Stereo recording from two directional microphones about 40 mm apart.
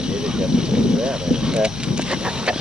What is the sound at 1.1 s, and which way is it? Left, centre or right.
Speech, right.